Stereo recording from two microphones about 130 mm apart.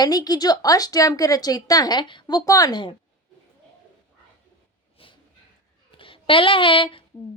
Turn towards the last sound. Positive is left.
turn(degrees=40)  # may be behind; listen again after turning